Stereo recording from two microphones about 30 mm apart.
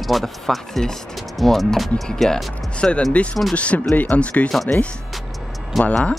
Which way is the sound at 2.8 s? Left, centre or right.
Left.